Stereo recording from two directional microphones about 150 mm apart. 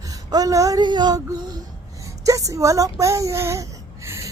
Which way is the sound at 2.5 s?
20° right (ahead or behind).